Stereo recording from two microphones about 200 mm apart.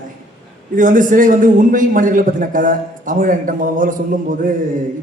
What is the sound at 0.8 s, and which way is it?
A man's voice, 40° right (ahead or behind).